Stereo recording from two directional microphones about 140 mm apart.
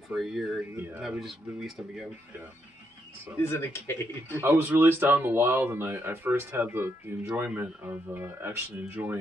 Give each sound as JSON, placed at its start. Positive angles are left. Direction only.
{"t": 0.1, "sound": "speech", "side_deg": 0}
{"t": 3.4, "sound": "speech", "side_deg": 20}
{"t": 4.4, "sound": "speech", "side_deg": -15}